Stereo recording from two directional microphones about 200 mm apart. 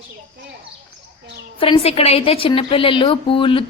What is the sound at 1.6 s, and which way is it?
A woman's voice, 30° left (ahead or behind).